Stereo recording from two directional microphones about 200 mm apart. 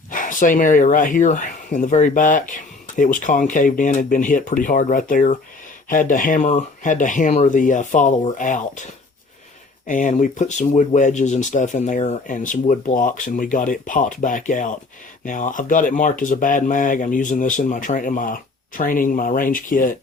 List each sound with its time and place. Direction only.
0.1 s speech: 40° left (ahead or behind)
9.8 s speech: 40° left (ahead or behind)